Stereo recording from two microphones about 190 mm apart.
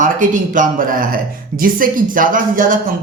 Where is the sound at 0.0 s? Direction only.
45° right (ahead or behind).